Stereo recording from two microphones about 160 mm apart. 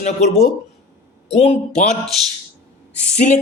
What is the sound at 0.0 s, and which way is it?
A man's voice, 45° left (ahead or behind).